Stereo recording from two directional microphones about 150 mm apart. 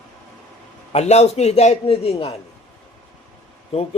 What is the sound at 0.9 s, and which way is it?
Speech, 45° left (ahead or behind).